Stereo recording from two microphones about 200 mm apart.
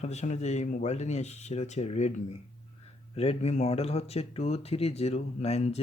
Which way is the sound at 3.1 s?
30° left (ahead or behind).